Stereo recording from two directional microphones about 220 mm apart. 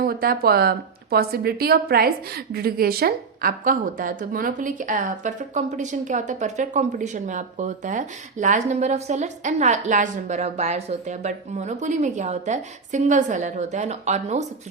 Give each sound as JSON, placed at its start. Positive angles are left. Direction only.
{"t": 0.0, "sound": "a woman's voice", "side_deg": -40}